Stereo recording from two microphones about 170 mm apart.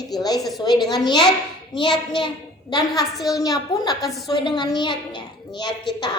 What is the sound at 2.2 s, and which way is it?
A woman's voice, 25° left (ahead or behind).